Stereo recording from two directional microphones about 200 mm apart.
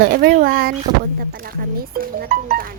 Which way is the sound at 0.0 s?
50° right (ahead or behind).